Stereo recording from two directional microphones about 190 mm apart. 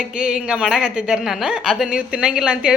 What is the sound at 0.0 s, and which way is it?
A woman's voice, 5° right (ahead or behind).